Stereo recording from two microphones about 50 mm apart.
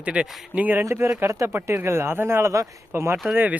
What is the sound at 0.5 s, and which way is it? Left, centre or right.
Speech, right.